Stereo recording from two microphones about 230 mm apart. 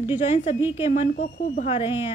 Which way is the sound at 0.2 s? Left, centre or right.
Left.